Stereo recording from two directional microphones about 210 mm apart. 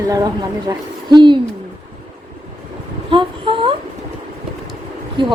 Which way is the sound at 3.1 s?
25° right (ahead or behind).